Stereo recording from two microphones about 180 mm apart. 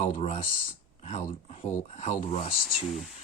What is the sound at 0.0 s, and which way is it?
Speech, 35° left (ahead or behind).